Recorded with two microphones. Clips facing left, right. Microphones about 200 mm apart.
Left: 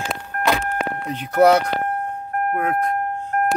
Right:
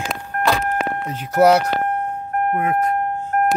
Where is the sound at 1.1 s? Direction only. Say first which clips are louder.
Even; 5° right (ahead or behind).